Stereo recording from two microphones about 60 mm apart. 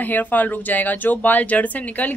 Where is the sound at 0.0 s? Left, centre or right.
Left.